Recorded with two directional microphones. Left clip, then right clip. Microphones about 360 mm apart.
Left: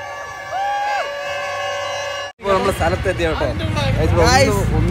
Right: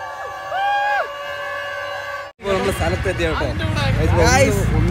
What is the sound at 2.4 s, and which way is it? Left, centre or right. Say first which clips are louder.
Speech: left 3 dB; centre.